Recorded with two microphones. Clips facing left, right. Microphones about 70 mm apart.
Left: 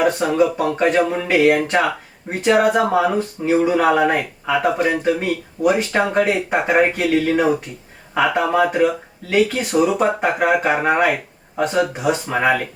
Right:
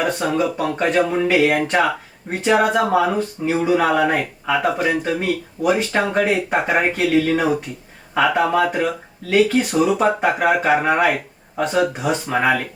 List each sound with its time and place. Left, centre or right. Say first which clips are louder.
0.0 s speech: left 3 dB; centre